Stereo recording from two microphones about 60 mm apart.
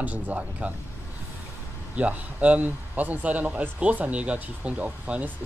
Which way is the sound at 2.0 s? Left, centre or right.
Right.